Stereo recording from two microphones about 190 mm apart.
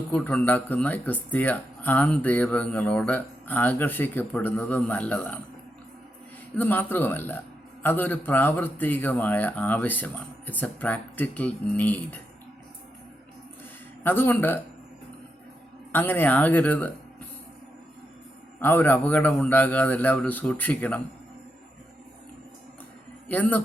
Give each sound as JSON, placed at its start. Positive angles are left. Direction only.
{"t": 0.1, "sound": "speech", "side_deg": 5}
{"t": 6.6, "sound": "speech", "side_deg": 10}
{"t": 14.0, "sound": "speech", "side_deg": 10}
{"t": 15.9, "sound": "speech", "side_deg": 10}
{"t": 18.6, "sound": "speech", "side_deg": 10}
{"t": 23.3, "sound": "speech", "side_deg": 10}